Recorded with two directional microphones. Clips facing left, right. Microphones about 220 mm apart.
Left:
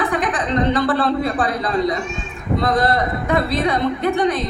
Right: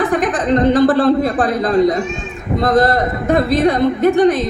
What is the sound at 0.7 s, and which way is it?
Speech, 45° right (ahead or behind).